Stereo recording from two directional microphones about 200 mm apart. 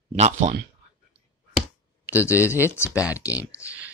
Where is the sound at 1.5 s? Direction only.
10° right (ahead or behind).